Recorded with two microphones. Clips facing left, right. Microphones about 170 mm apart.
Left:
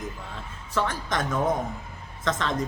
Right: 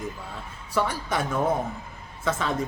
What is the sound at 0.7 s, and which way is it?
A woman's voice, 10° right (ahead or behind).